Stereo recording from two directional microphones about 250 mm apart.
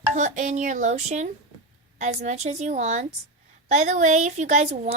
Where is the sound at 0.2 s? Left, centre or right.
Right.